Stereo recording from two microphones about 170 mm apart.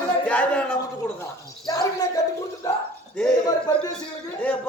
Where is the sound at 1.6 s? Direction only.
20° left (ahead or behind).